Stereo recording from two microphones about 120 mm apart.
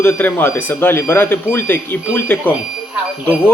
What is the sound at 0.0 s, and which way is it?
Speech, 15° left (ahead or behind).